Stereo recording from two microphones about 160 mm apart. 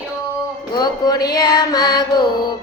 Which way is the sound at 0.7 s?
25° left (ahead or behind).